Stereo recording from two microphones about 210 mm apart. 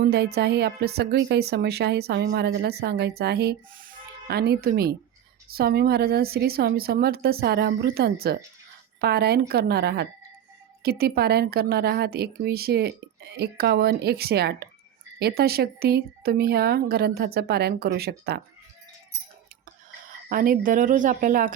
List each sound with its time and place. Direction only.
0.0 s speech: 50° right (ahead or behind)
20.3 s speech: 40° right (ahead or behind)